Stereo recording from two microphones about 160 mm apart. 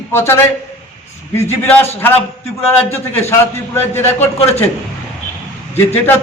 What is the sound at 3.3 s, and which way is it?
Speech, 15° left (ahead or behind).